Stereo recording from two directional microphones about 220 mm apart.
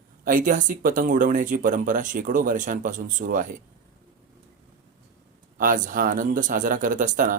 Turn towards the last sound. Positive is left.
turn(degrees=-35)  # may be behind; listen again after turning